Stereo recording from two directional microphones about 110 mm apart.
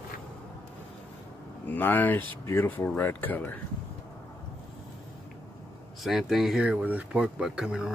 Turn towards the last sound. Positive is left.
turn(degrees=-5)  # may be behind; listen again after turning